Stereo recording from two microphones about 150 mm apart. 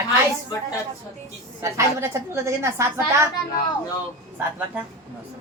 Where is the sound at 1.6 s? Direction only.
20° right (ahead or behind).